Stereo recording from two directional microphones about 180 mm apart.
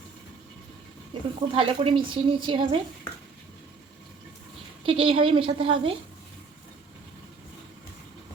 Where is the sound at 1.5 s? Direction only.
30° right (ahead or behind).